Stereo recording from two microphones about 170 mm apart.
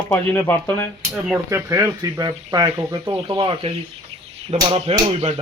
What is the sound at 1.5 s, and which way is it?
Speech, 15° right (ahead or behind).